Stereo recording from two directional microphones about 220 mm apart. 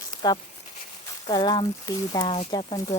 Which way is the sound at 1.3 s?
20° left (ahead or behind).